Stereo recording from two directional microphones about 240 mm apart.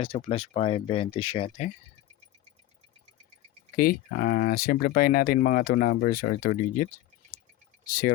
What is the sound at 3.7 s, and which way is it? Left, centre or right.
Speech, left.